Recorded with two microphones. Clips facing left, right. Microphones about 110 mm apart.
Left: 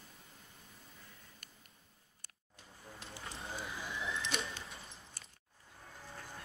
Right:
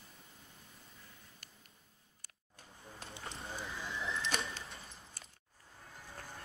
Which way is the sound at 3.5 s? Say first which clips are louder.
Even; 5° left (ahead or behind).